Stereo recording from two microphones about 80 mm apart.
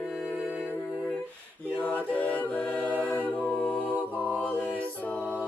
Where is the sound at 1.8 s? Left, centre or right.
Centre.